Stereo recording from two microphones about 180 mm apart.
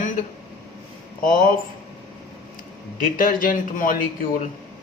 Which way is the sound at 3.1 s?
50° left (ahead or behind).